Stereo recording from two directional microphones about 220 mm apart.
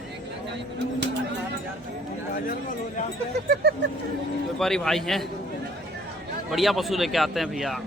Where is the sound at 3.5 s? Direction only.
50° right (ahead or behind).